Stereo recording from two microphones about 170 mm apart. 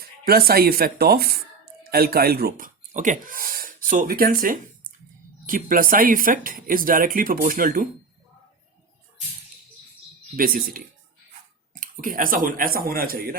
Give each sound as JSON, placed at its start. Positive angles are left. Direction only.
{"t": 0.0, "sound": "speech", "side_deg": -65}
{"t": 10.3, "sound": "speech", "side_deg": -55}